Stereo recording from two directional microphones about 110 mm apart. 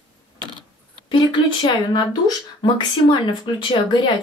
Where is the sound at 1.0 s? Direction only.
50° left (ahead or behind).